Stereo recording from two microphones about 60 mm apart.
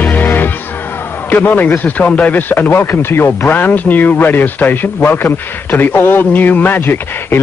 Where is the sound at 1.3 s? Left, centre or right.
Left.